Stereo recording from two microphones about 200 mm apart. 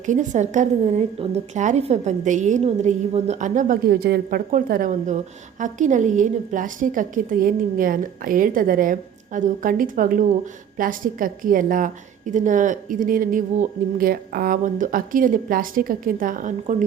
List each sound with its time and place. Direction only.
0.0 s a woman's voice: 40° right (ahead or behind)